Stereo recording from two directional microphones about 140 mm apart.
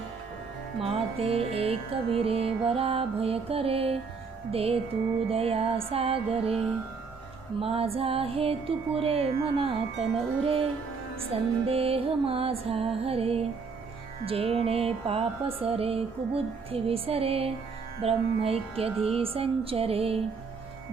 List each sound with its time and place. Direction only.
0.8 s music: 45° right (ahead or behind)
7.6 s music: 45° right (ahead or behind)